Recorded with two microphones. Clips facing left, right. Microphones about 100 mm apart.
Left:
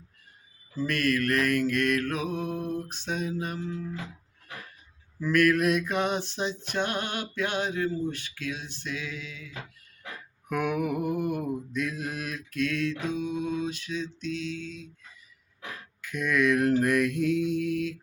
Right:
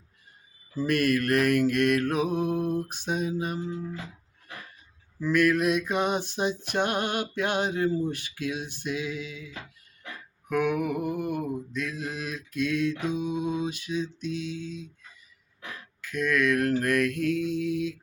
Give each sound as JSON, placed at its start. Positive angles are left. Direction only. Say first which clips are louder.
{"t": 0.8, "sound": "mantra", "louder": "right 2 dB", "side_deg": -15}
{"t": 5.2, "sound": "mantra", "louder": "even", "side_deg": 0}
{"t": 10.5, "sound": "mantra", "louder": "right 2 dB", "side_deg": 10}
{"t": 16.1, "sound": "mantra", "louder": "even", "side_deg": 15}
{"t": 17.7, "sound": "mantra", "louder": "right 1 dB", "side_deg": 0}